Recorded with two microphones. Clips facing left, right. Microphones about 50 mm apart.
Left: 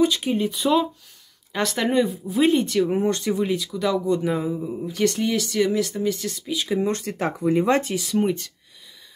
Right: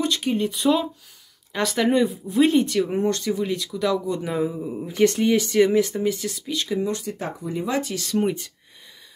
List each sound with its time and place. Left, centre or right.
0.0 s speech: centre
3.1 s speech: left
3.4 s speech: centre
4.8 s speech: right
5.9 s speech: centre
6.9 s speech: left
8.0 s speech: centre